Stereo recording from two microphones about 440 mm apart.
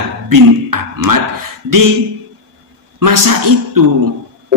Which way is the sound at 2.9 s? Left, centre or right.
Right.